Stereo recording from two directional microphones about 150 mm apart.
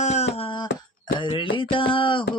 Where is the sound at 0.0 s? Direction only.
45° left (ahead or behind).